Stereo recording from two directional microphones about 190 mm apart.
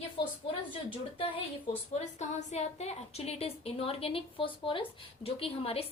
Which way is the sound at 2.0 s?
40° left (ahead or behind).